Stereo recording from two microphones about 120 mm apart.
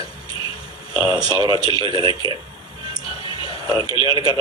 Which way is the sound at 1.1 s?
35° right (ahead or behind).